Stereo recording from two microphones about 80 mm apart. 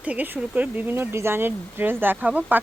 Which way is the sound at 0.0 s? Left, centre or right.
Centre.